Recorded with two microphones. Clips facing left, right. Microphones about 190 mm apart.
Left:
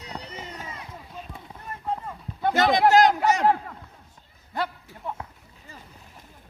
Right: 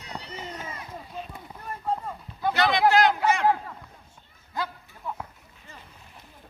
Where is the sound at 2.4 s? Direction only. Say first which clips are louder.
Left 2 dB; 45° left (ahead or behind).